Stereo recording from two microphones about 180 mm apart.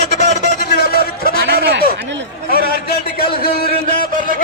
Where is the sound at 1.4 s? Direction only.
60° right (ahead or behind).